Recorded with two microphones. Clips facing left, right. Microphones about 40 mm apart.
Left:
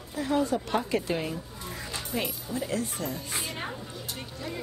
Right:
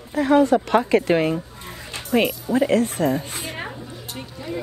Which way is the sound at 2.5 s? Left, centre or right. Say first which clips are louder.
Right 13 dB; right.